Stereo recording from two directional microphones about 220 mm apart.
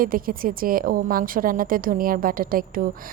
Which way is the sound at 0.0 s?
40° right (ahead or behind).